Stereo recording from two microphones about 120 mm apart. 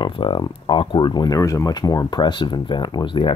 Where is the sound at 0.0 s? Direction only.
45° left (ahead or behind).